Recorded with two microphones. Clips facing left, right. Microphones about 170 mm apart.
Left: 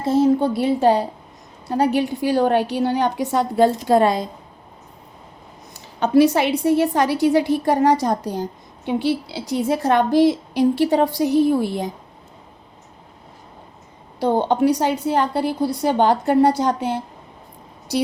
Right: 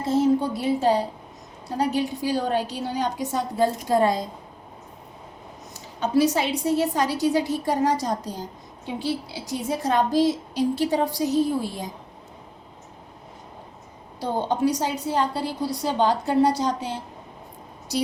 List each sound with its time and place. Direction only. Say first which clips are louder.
0.2 s a woman's voice: left 5 dB; 65° left (ahead or behind)
5.7 s a woman's voice: left 6 dB; 65° left (ahead or behind)
14.2 s a woman's voice: left 6 dB; 65° left (ahead or behind)